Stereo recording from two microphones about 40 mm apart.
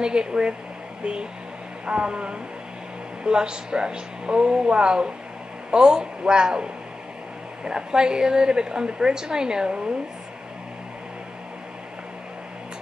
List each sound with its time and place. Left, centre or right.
0.0 s a woman's voice: right
1.9 s a woman's voice: right